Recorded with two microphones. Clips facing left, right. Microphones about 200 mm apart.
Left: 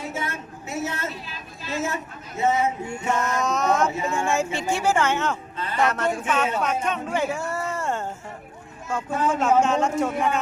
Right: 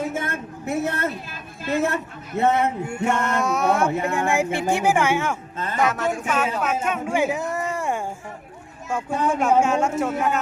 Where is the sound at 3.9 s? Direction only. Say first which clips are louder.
Right 4 dB; 60° right (ahead or behind).